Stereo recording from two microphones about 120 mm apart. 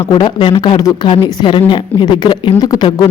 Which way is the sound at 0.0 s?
45° left (ahead or behind).